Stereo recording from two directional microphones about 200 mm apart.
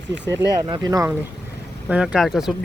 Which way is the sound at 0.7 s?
15° right (ahead or behind).